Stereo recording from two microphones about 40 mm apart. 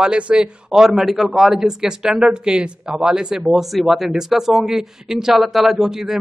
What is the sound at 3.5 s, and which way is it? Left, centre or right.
A man's voice, centre.